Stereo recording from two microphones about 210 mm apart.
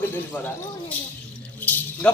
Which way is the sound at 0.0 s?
10° left (ahead or behind).